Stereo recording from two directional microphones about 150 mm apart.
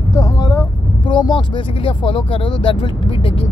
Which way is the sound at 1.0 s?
30° left (ahead or behind).